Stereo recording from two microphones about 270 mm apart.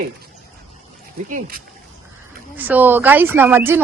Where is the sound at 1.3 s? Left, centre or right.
Right.